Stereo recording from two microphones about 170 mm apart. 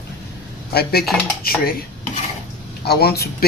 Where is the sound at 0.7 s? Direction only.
65° left (ahead or behind).